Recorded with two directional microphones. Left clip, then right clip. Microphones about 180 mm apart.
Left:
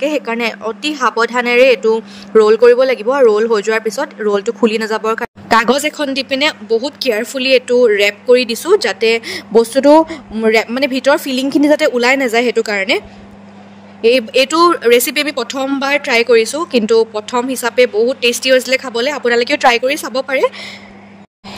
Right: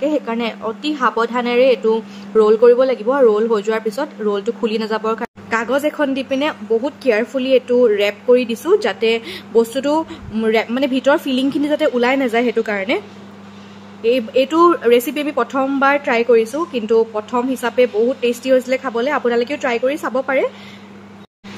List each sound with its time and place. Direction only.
0.0 s speech: 40° left (ahead or behind)
5.5 s speech: 55° left (ahead or behind)
14.0 s speech: 50° left (ahead or behind)